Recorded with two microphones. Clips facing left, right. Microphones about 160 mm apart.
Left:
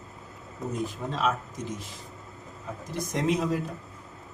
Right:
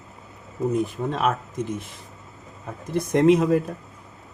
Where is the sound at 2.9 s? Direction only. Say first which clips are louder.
Right 10 dB; 60° right (ahead or behind).